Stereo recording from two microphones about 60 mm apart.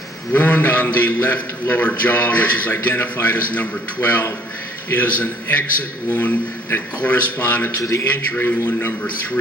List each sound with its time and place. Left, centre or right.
0.3 s a man's voice: left